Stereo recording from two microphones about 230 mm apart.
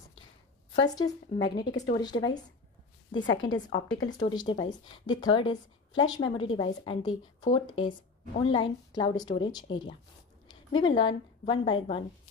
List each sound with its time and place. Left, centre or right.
0.7 s a woman's voice: centre